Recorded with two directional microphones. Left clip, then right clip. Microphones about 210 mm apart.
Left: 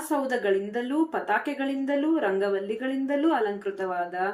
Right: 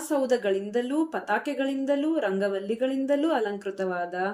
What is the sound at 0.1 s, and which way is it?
A woman's voice, 45° right (ahead or behind).